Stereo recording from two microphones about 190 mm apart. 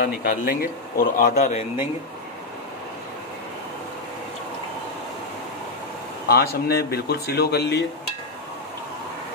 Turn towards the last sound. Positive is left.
turn(degrees=60)  # may be behind; listen again after turning